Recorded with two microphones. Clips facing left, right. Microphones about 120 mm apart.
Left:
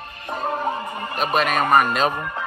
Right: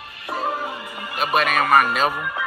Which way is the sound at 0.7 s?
45° left (ahead or behind).